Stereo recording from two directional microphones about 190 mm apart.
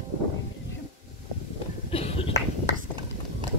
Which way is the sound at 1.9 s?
30° left (ahead or behind).